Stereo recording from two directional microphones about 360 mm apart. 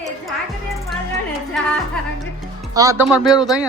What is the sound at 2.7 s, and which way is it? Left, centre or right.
Speech, centre.